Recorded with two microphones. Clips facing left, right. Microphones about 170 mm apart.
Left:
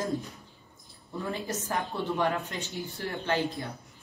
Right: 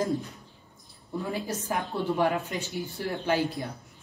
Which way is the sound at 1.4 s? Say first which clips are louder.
Right 1 dB; 10° right (ahead or behind).